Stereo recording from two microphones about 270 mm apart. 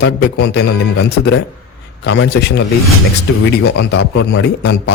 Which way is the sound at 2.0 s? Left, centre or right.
Left.